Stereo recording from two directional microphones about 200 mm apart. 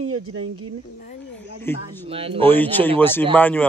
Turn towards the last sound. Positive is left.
turn(degrees=10)  # may be behind; listen again after turning